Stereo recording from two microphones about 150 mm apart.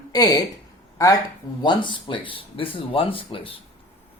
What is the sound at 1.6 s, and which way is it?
Speech, 30° left (ahead or behind).